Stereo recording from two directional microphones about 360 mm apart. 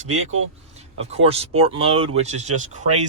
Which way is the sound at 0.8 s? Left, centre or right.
Centre.